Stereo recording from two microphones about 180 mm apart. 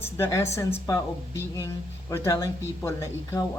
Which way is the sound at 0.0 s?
15° left (ahead or behind).